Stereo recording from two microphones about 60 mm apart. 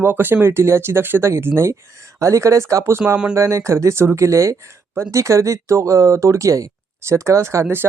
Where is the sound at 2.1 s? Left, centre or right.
Right.